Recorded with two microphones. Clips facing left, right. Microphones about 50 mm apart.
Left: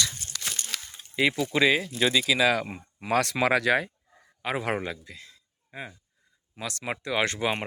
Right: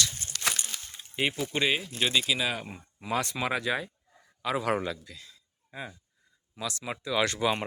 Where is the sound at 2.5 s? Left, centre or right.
Left.